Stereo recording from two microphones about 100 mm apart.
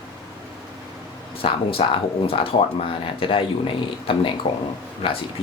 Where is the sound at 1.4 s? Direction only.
65° left (ahead or behind).